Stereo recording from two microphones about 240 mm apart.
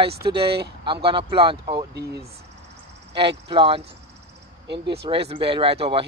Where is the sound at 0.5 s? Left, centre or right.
Right.